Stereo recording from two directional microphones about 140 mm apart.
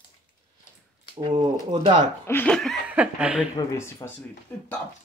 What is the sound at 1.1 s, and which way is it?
Speech, 35° right (ahead or behind).